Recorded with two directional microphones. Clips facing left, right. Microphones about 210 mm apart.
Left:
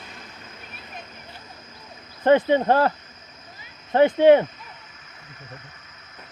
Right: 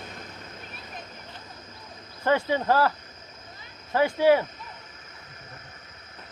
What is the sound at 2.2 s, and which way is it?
Speech, 20° left (ahead or behind).